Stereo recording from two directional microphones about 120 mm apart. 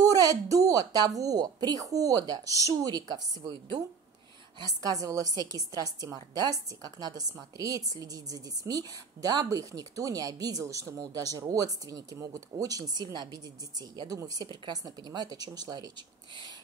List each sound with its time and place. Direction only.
0.0 s a woman's voice: 30° right (ahead or behind)
4.6 s a woman's voice: 30° right (ahead or behind)